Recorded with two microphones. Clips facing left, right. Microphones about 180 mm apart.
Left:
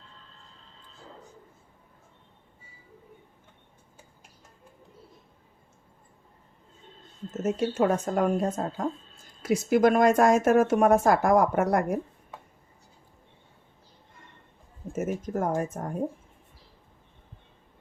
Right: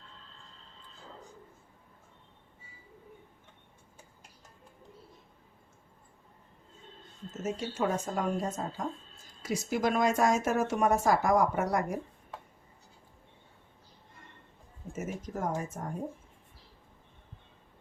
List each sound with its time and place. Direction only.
7.4 s speech: 55° left (ahead or behind)
14.9 s speech: 55° left (ahead or behind)